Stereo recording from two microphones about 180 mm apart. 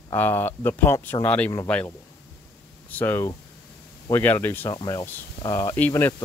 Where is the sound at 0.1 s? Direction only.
10° left (ahead or behind).